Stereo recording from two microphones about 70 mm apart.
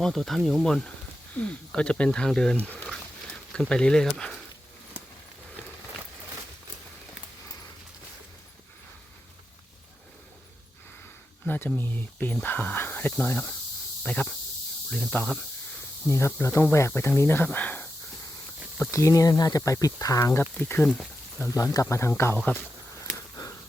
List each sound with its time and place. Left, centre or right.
0.0 s speech: centre
2.7 s a sound: centre
3.7 s speech: centre
11.4 s speech: left
14.0 s speech: centre
16.0 s speech: left
18.8 s speech: left
20.4 s speech: centre
21.5 s speech: left
22.5 s speech: left